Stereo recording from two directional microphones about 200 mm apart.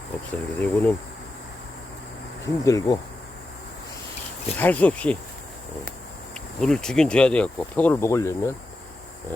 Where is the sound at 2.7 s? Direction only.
20° left (ahead or behind).